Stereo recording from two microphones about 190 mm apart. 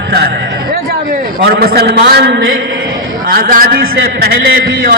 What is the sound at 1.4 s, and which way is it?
A man's voice, 55° right (ahead or behind).